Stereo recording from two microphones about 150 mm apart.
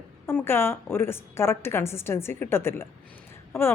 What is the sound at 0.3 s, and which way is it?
A woman's voice, 15° left (ahead or behind).